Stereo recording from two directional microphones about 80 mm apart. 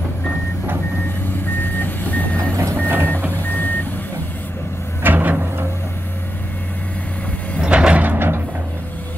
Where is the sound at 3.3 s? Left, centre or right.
Left.